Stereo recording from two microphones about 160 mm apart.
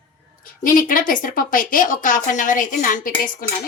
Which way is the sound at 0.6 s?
60° left (ahead or behind).